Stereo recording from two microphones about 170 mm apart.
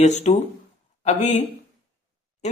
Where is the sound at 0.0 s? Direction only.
40° left (ahead or behind).